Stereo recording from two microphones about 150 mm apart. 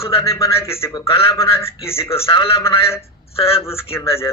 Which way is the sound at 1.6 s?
20° left (ahead or behind).